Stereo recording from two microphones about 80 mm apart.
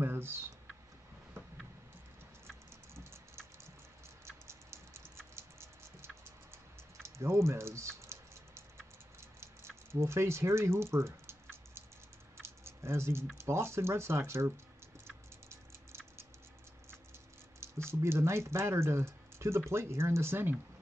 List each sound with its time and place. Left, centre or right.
0.0 s a sound: right
2.9 s typing: right
4.3 s typing: right
9.2 s patter: right
9.9 s speech: right
12.4 s typing: right
13.4 s speech: right
17.6 s speech: right